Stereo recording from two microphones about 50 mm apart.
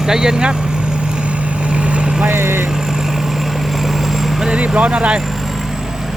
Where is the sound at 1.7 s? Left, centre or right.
Right.